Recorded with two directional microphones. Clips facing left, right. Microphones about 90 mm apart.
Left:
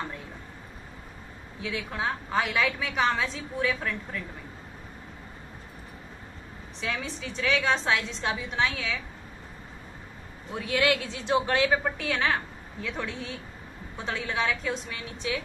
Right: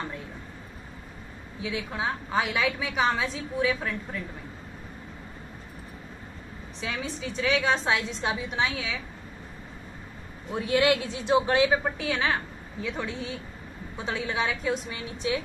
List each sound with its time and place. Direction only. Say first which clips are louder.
1.6 s a woman's voice: right 1 dB; 10° right (ahead or behind)
6.8 s a woman's voice: even; 10° right (ahead or behind)
10.5 s a woman's voice: right 3 dB; 20° right (ahead or behind)